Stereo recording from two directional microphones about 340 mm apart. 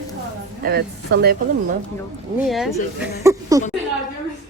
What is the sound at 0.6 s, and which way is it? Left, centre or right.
Speech, right.